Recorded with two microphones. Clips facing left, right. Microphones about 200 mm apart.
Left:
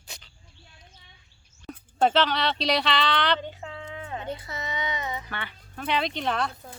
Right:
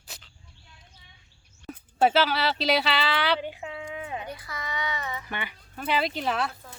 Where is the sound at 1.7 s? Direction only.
5° right (ahead or behind).